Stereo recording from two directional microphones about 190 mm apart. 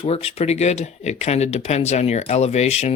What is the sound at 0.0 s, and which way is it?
Speech, 30° left (ahead or behind).